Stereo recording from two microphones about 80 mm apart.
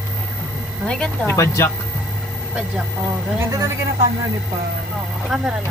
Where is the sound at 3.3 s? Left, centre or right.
Right.